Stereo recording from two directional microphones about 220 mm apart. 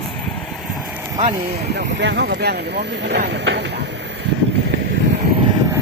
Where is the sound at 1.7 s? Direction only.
55° right (ahead or behind).